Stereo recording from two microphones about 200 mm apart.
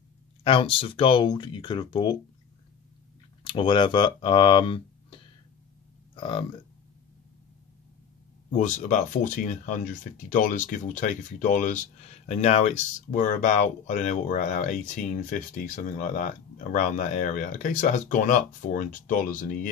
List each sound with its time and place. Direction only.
0.4 s speech: 25° left (ahead or behind)
3.4 s speech: 25° left (ahead or behind)
8.5 s speech: 40° left (ahead or behind)